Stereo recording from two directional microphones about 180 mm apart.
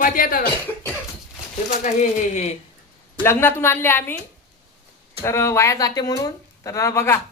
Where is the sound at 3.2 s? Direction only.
15° left (ahead or behind).